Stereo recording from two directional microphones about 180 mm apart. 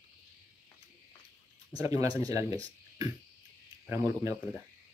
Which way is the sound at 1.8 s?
20° right (ahead or behind).